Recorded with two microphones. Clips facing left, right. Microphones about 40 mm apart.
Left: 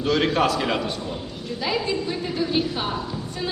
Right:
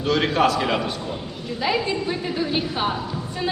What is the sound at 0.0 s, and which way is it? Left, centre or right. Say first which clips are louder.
A man's voice: right 1 dB; centre.